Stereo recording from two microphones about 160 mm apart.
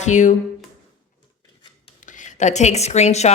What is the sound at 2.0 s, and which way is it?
A woman's voice, 50° left (ahead or behind).